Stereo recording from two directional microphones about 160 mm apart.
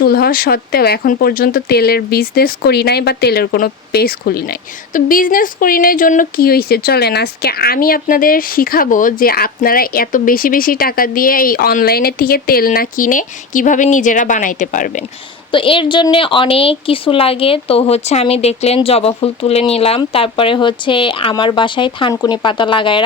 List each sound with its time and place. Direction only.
0.0 s speech: 75° left (ahead or behind)
4.9 s speech: 60° left (ahead or behind)
15.5 s a woman's voice: 30° left (ahead or behind)